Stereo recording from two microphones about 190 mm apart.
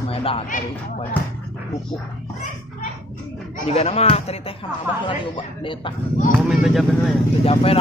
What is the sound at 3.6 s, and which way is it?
Speech, 35° left (ahead or behind).